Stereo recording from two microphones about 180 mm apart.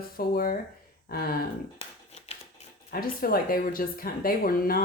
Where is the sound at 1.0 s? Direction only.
55° left (ahead or behind).